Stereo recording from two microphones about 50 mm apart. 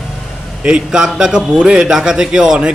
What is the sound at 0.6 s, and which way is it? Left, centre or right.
A man's voice, centre.